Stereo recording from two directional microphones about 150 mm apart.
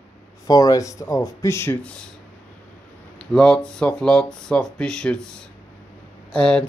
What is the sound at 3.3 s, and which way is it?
Speech, 5° left (ahead or behind).